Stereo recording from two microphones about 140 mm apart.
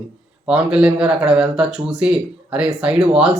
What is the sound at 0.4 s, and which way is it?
Speech, 5° right (ahead or behind).